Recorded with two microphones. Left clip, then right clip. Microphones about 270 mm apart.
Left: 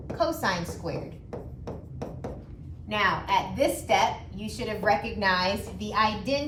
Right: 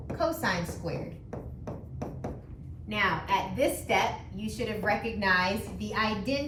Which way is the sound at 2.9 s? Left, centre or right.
Centre.